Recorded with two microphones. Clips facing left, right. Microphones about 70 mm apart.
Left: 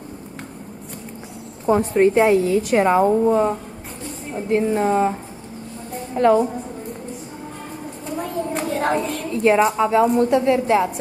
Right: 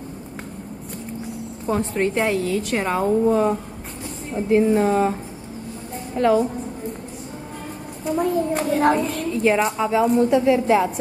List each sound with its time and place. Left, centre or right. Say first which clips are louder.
1.7 s a woman's voice: left 6 dB; centre
8.0 s a woman's voice: right 5 dB; centre